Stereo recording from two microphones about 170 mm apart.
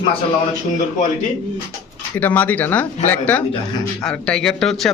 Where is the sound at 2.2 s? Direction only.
10° left (ahead or behind).